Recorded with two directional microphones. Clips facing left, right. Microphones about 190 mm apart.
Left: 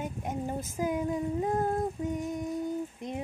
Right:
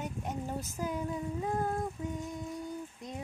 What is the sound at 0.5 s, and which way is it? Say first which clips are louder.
Speech: left 5 dB; 50° left (ahead or behind).